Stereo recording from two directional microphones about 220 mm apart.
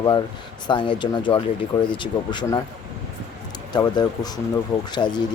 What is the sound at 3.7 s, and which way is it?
Speech, 20° left (ahead or behind).